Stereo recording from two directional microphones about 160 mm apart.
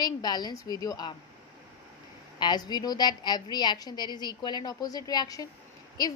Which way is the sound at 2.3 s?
25° left (ahead or behind).